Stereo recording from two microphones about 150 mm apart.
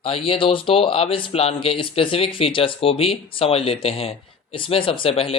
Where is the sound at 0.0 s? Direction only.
40° left (ahead or behind).